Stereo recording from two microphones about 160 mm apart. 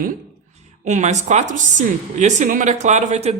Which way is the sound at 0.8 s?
50° right (ahead or behind).